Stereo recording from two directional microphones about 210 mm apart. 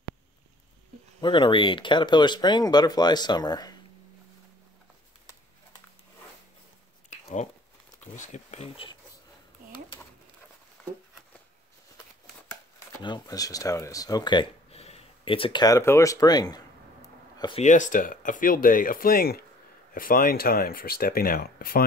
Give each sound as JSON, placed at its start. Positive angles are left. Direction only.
{"t": 1.2, "sound": "speech", "side_deg": 25}
{"t": 7.1, "sound": "a sound", "side_deg": 35}
{"t": 8.2, "sound": "speech", "side_deg": 35}
{"t": 12.4, "sound": "speech", "side_deg": 20}
{"t": 17.6, "sound": "speech", "side_deg": 35}